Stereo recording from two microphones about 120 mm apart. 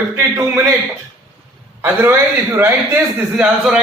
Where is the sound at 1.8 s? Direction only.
20° right (ahead or behind).